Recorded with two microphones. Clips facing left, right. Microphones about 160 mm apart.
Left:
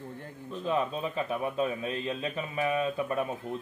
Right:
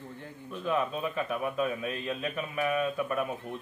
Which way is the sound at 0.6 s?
30° left (ahead or behind).